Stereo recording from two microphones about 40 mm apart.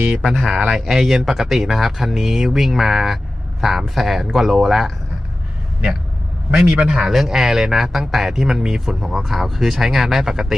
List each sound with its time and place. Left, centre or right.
0.3 s speech: centre
6.5 s speech: centre